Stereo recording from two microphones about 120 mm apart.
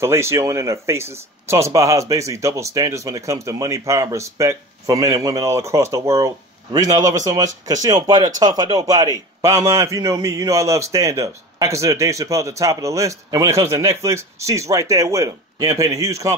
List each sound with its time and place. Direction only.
0.0 s speech: 20° right (ahead or behind)